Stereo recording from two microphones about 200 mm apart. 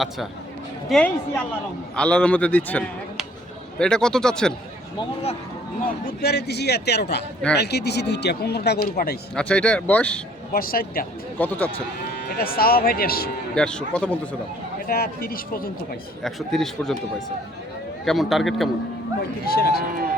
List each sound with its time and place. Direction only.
0.9 s a man's voice: 5° left (ahead or behind)
5.8 s speech: 55° left (ahead or behind)
9.3 s speech: 5° left (ahead or behind)
10.5 s speech: 50° left (ahead or behind)
11.3 s a man's voice: 10° left (ahead or behind)
12.4 s speech: 50° left (ahead or behind)
13.6 s speech: 5° left (ahead or behind)
14.8 s speech: 50° left (ahead or behind)
16.2 s speech: centre (ahead or behind)
18.0 s speech: centre (ahead or behind)
19.5 s speech: 50° left (ahead or behind)